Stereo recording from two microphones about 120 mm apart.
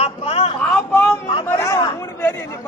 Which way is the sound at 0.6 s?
10° left (ahead or behind).